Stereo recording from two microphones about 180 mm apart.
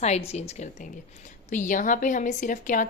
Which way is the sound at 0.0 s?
35° left (ahead or behind).